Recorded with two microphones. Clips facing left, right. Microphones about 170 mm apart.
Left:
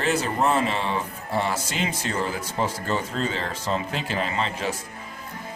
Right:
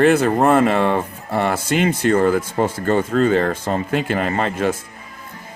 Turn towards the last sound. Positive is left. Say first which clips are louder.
# right 8 dB
turn(degrees=-55)  # may be behind; listen again after turning